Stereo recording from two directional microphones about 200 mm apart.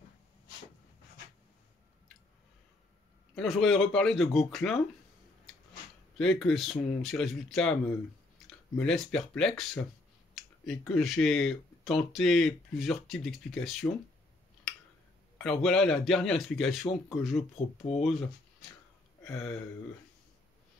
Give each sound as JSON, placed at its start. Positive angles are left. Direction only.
{"t": 3.3, "sound": "speech", "side_deg": 0}
{"t": 6.1, "sound": "speech", "side_deg": 0}
{"t": 15.3, "sound": "speech", "side_deg": 5}
{"t": 17.9, "sound": "speech", "side_deg": 30}
{"t": 19.2, "sound": "a sound", "side_deg": 5}